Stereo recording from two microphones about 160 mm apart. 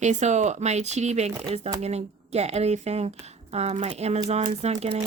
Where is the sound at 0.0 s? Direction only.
45° right (ahead or behind).